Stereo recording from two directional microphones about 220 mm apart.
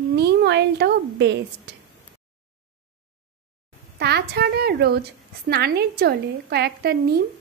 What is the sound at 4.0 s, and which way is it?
A woman's voice, 45° right (ahead or behind).